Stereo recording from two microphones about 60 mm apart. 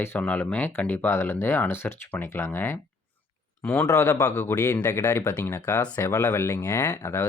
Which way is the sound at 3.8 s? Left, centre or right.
Left.